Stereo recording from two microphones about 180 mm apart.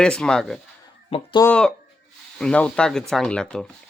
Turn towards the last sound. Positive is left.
turn(degrees=5)  # may be behind; listen again after turning